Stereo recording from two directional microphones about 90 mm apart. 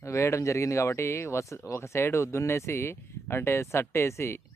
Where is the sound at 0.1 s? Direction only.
30° left (ahead or behind).